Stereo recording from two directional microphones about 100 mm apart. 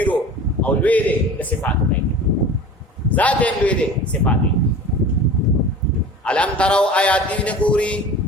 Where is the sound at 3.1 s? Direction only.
15° left (ahead or behind).